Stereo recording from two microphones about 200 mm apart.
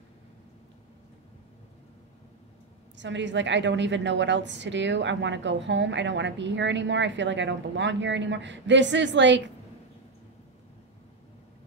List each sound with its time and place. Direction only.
3.0 s a woman's voice: 65° right (ahead or behind)